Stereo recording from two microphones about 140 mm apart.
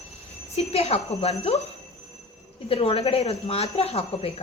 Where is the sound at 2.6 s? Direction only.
40° left (ahead or behind).